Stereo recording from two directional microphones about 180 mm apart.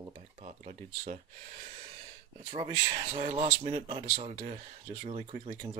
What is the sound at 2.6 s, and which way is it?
Speech, 30° right (ahead or behind).